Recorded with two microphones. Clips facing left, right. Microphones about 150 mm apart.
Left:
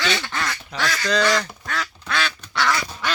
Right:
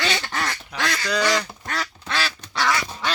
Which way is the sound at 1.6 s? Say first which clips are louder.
Left 1 dB; 35° right (ahead or behind).